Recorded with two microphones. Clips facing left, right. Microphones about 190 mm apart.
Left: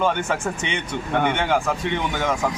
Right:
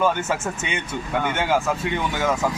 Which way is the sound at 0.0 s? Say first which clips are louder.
Even; 5° right (ahead or behind).